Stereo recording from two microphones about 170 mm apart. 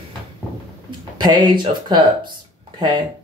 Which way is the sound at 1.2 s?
25° right (ahead or behind).